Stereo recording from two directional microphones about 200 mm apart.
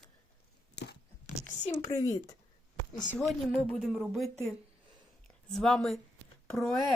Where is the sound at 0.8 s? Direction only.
60° left (ahead or behind).